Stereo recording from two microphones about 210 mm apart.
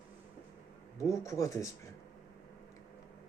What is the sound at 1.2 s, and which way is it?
Speech, 15° left (ahead or behind).